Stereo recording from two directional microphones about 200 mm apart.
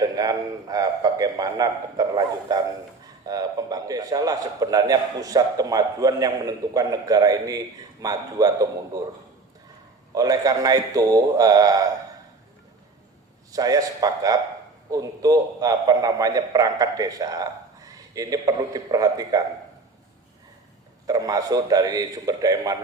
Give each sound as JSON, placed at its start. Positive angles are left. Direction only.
{"t": 0.0, "sound": "a man's voice", "side_deg": -20}
{"t": 10.2, "sound": "a man's voice", "side_deg": -20}
{"t": 13.5, "sound": "a man's voice", "side_deg": -20}
{"t": 21.1, "sound": "a man's voice", "side_deg": -20}